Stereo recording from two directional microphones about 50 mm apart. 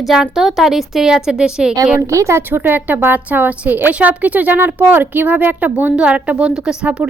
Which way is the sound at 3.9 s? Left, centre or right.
Right.